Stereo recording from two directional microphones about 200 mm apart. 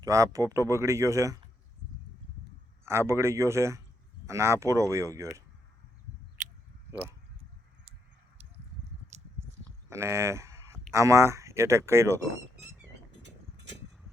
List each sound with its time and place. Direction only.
0.0 s speech: 15° right (ahead or behind)
2.8 s speech: 15° right (ahead or behind)
6.9 s speech: 5° right (ahead or behind)
9.1 s biting: 35° right (ahead or behind)
9.9 s speech: 15° right (ahead or behind)